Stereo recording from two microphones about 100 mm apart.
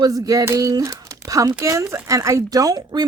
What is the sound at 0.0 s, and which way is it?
A woman's voice, 35° right (ahead or behind).